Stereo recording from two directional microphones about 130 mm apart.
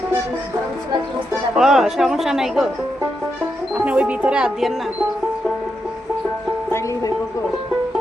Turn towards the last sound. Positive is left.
turn(degrees=25)  # may be behind; listen again after turning